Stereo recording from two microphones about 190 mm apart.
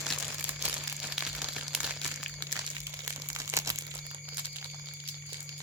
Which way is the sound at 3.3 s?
15° right (ahead or behind).